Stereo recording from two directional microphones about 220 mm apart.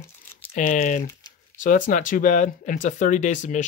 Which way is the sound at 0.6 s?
35° left (ahead or behind).